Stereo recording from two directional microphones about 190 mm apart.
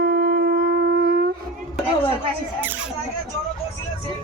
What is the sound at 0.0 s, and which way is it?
Shofar, 55° right (ahead or behind).